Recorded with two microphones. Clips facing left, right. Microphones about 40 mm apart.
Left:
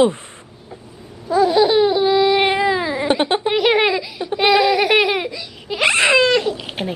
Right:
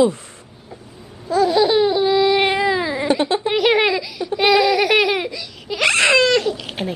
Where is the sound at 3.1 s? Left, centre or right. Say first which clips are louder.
Left 1 dB; left.